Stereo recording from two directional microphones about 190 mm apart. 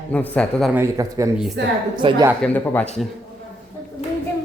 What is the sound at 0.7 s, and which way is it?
Speech, 15° right (ahead or behind).